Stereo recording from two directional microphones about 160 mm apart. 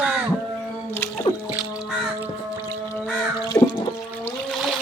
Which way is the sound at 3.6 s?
20° left (ahead or behind).